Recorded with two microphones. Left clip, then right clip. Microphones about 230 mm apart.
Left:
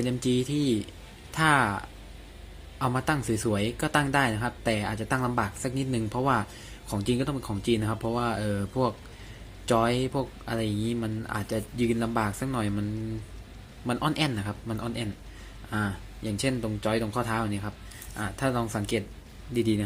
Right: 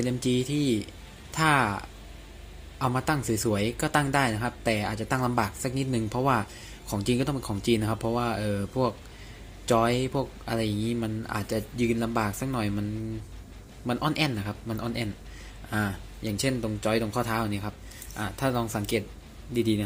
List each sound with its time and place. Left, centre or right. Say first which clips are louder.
0.0 s speech: even; centre
13.8 s speech: even; centre